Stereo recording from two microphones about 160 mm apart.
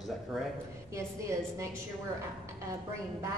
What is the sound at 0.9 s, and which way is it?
Speech, 20° right (ahead or behind).